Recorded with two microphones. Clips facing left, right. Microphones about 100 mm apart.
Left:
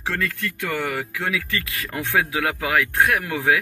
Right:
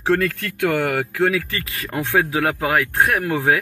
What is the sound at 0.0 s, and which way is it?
Speech, 50° right (ahead or behind).